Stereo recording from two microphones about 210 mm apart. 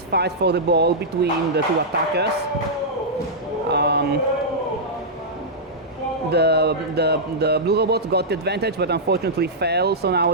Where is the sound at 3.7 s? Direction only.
50° right (ahead or behind).